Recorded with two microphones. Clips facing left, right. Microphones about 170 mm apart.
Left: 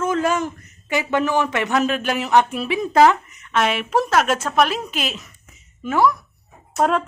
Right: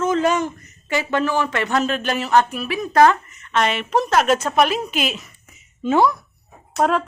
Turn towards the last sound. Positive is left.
turn(degrees=0)  # may be behind; listen again after turning